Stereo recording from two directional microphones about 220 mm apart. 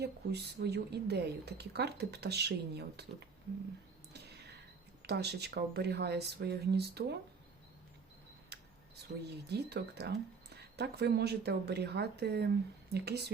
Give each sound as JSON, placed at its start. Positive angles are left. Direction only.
{"t": 0.0, "sound": "a woman's voice", "side_deg": -50}
{"t": 5.0, "sound": "a woman's voice", "side_deg": -50}
{"t": 8.5, "sound": "camera", "side_deg": -50}
{"t": 9.5, "sound": "a woman's voice", "side_deg": -50}